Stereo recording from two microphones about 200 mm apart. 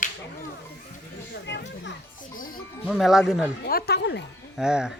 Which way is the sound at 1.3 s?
60° left (ahead or behind).